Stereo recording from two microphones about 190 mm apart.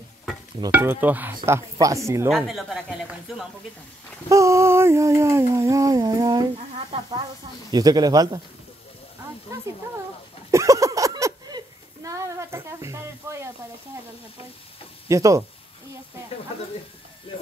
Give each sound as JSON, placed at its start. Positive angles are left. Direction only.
{"t": 0.7, "sound": "speech", "side_deg": -10}
{"t": 2.2, "sound": "speech", "side_deg": 0}
{"t": 4.3, "sound": "a sound", "side_deg": -15}
{"t": 5.4, "sound": "speech", "side_deg": -15}
{"t": 10.5, "sound": "a sound", "side_deg": -15}
{"t": 15.0, "sound": "speech", "side_deg": -15}